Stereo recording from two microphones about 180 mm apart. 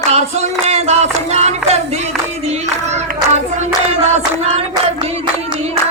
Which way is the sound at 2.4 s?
35° right (ahead or behind).